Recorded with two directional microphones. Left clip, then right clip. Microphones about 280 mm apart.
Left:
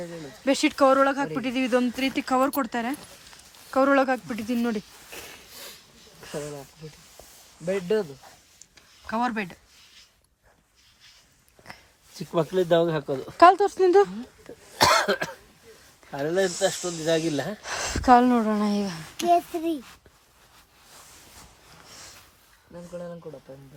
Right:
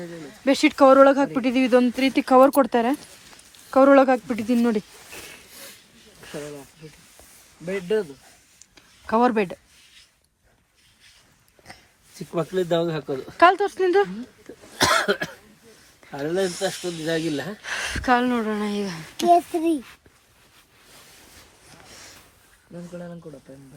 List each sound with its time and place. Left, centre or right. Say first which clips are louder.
0.0 s a sound: even; left
0.4 s speech: right 4 dB; centre
6.3 s snake: left 1 dB; left
7.6 s speech: right 1 dB; left
8.5 s a sound: right 1 dB; centre
11.7 s a sound: even; centre
12.1 s speech: left 1 dB; left
13.1 s speech: even; left
14.9 s cough: right 1 dB; centre
16.4 s speech: left 2 dB; centre
19.1 s speech: right 4 dB; centre